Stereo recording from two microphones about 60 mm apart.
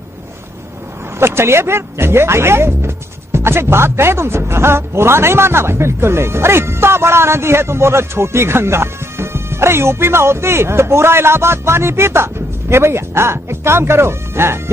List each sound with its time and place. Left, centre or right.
1.2 s speech: right